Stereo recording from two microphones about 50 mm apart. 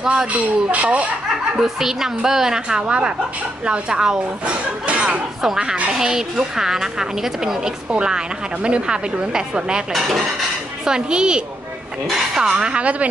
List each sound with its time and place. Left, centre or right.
0.0 s a woman's voice: centre
0.3 s speech: right
1.6 s a woman's voice: centre
2.8 s a woman's voice: right
4.8 s a sound: right
5.4 s a woman's voice: centre
9.9 s dishes: centre
10.9 s a woman's voice: centre